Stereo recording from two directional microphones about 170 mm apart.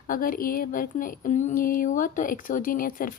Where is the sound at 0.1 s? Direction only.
55° left (ahead or behind).